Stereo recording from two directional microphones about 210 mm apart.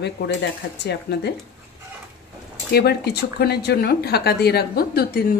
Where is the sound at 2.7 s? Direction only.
50° left (ahead or behind).